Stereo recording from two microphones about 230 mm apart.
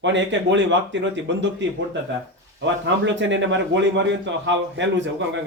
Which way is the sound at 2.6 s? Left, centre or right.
Right.